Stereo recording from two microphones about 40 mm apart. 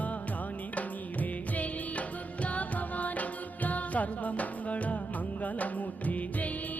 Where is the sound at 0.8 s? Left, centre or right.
Left.